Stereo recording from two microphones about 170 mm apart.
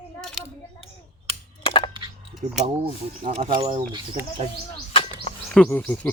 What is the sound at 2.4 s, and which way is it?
Speech, 45° right (ahead or behind).